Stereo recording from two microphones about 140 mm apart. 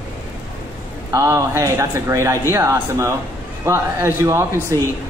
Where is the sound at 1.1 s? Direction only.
20° right (ahead or behind).